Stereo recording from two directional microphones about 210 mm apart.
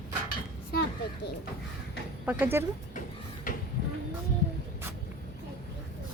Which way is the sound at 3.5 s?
40° left (ahead or behind).